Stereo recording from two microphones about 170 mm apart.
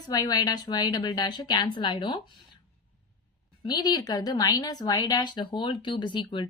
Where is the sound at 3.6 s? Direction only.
25° left (ahead or behind).